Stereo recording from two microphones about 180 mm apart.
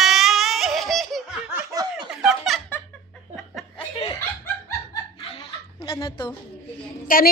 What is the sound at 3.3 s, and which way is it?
Chuckle, centre (ahead or behind).